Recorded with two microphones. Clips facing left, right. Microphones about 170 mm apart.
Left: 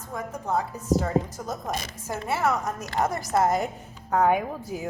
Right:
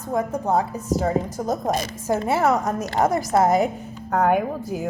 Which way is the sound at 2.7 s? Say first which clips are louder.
Right 6 dB; 25° right (ahead or behind).